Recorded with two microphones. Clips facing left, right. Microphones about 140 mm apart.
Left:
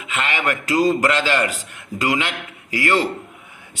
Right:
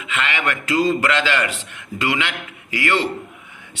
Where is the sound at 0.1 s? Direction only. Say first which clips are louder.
Left 1 dB; 35° left (ahead or behind).